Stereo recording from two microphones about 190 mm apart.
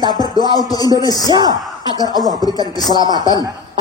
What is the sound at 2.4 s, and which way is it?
Speech, 20° left (ahead or behind).